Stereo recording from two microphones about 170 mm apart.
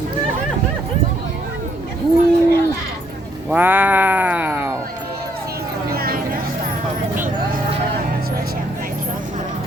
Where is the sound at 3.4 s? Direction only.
10° right (ahead or behind).